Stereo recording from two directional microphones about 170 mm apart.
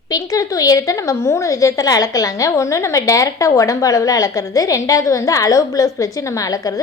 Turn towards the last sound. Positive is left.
turn(degrees=20)  # may be behind; listen again after turning